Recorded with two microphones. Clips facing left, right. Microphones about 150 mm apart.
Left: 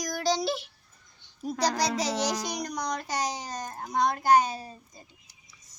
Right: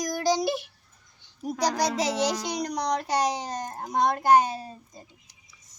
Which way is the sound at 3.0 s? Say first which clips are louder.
Right 6 dB; 60° right (ahead or behind).